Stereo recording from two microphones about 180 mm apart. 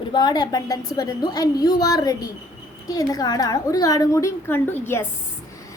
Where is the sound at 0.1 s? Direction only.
25° left (ahead or behind).